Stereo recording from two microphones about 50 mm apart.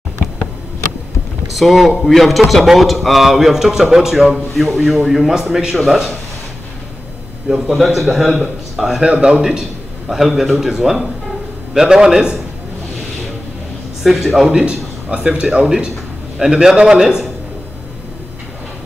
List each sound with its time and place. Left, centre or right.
1.5 s a man's voice: centre
7.4 s a man's voice: centre
9.0 s a man's voice: centre
14.0 s a man's voice: centre
14.7 s a man's voice: right